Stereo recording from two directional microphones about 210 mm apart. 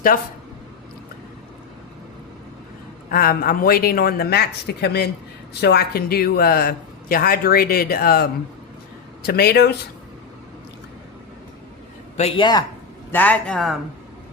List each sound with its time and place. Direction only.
3.1 s speech: 45° left (ahead or behind)
12.1 s speech: 25° left (ahead or behind)
13.1 s a man's voice: 10° left (ahead or behind)